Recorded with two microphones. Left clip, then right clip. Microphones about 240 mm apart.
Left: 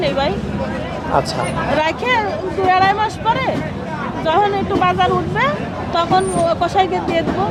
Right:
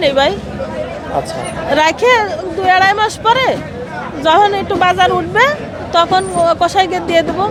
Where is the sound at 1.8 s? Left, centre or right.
Right.